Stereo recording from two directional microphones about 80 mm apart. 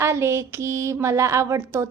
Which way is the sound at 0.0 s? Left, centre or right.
Right.